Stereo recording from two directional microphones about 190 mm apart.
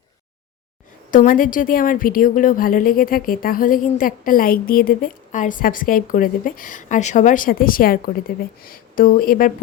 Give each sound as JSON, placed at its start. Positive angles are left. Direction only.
{"t": 1.1, "sound": "a woman's voice", "side_deg": 45}